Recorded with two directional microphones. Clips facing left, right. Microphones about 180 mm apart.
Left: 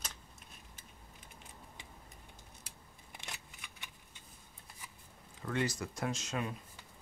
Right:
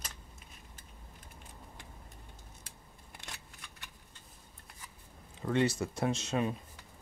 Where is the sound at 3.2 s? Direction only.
5° left (ahead or behind).